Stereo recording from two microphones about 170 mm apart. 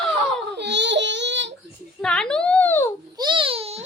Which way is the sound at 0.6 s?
90° right.